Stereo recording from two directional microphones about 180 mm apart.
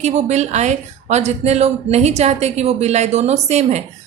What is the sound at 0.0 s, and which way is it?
A woman's voice, 35° right (ahead or behind).